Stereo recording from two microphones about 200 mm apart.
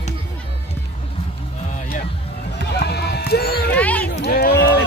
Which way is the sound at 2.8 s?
55° left (ahead or behind).